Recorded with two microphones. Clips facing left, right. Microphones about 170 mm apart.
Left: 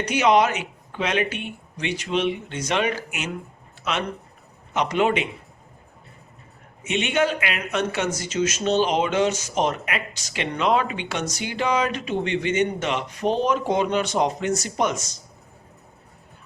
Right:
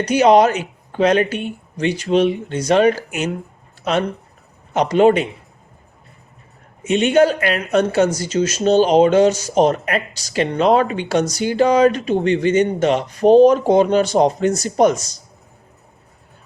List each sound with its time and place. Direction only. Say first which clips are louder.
0.0 s speech: right 7 dB; 35° right (ahead or behind)
4.7 s speech: right 8 dB; 35° right (ahead or behind)
6.8 s speech: right 9 dB; 40° right (ahead or behind)